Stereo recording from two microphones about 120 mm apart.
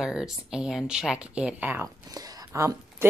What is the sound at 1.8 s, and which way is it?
Speech, 30° right (ahead or behind).